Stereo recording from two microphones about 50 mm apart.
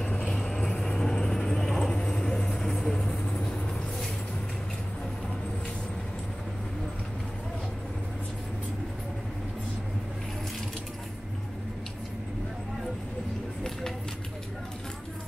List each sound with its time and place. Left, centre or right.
0.0 s vehicle: centre
3.0 s vehicle: left